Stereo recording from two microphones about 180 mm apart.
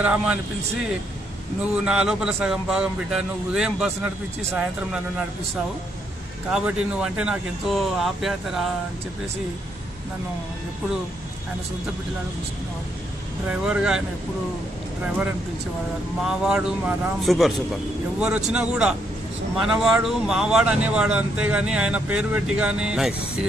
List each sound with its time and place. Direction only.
0.0 s speech: 5° right (ahead or behind)
1.6 s speech: 5° right (ahead or behind)
6.5 s speech: 5° right (ahead or behind)
13.5 s speech: 5° right (ahead or behind)
16.3 s speech: 5° right (ahead or behind)